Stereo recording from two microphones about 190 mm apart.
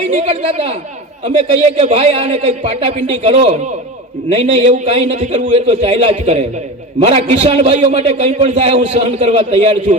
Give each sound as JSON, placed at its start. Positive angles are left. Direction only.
{"t": 0.1, "sound": "a man's voice", "side_deg": -35}